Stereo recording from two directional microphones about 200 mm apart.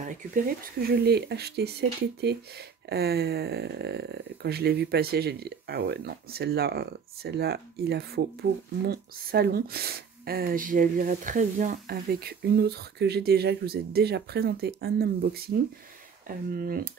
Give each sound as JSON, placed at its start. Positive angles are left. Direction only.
{"t": 0.0, "sound": "speech", "side_deg": -40}